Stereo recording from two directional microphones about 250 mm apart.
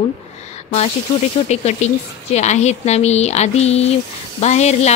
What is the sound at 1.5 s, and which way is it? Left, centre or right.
Speech, left.